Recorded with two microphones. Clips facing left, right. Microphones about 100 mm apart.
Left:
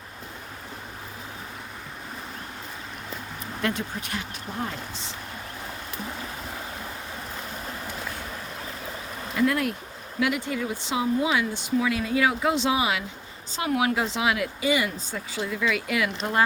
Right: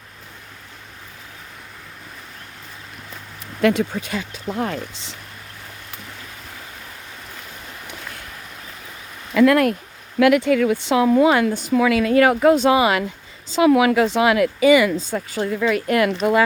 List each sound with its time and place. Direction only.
3.6 s speech: 90° right
9.3 s speech: 80° right; by 11.7 s 50° right (ahead or behind)
11.7 s speech: 75° right (ahead or behind)
13.5 s speech: 90° right
15.3 s speech: 50° right (ahead or behind)